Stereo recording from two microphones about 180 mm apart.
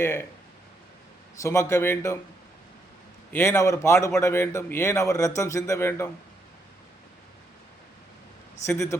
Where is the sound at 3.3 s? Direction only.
15° left (ahead or behind).